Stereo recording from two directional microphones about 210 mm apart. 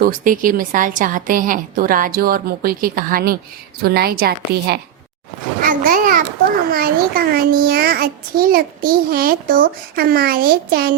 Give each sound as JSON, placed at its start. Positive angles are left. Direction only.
{"t": 0.0, "sound": "a woman's voice", "side_deg": -40}
{"t": 5.6, "sound": "a sound", "side_deg": -40}
{"t": 6.7, "sound": "a child's voice", "side_deg": -45}